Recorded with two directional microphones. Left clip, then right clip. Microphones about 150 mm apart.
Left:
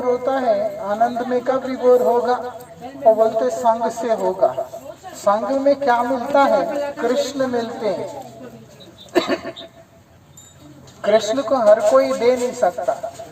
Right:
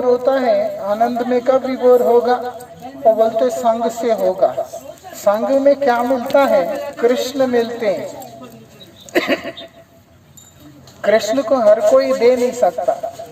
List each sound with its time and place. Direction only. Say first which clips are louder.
0.0 s a woman's voice: right 4 dB; 35° right (ahead or behind)
3.1 s a woman's voice: right 2 dB; 35° right (ahead or behind)
9.1 s a sound: right 2 dB; 40° right (ahead or behind)
11.0 s a woman's voice: right 2 dB; 35° right (ahead or behind)